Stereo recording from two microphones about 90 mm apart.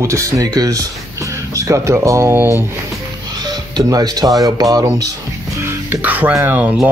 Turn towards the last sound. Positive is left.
turn(degrees=-20)  # may be behind; listen again after turning